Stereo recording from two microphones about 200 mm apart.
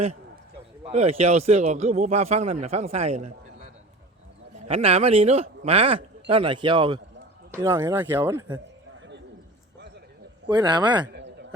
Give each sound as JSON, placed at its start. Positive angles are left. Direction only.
{"t": 0.9, "sound": "a man's voice", "side_deg": -30}
{"t": 4.7, "sound": "speech", "side_deg": -30}
{"t": 7.5, "sound": "speech", "side_deg": -10}
{"t": 10.5, "sound": "speech", "side_deg": -20}
{"t": 11.1, "sound": "a sound", "side_deg": -60}